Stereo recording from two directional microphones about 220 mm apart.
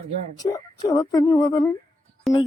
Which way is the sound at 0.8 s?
15° left (ahead or behind).